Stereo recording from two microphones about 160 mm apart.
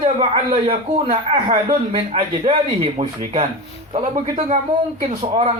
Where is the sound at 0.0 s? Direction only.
40° right (ahead or behind).